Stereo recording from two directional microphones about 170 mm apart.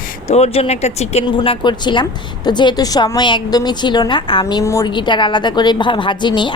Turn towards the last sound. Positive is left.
turn(degrees=25)  # may be behind; listen again after turning